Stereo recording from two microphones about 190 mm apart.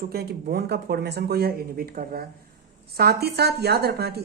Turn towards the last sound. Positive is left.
turn(degrees=-60)  # may be behind; listen again after turning